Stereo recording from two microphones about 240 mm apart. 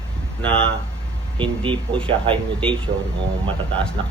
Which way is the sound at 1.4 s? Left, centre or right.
Right.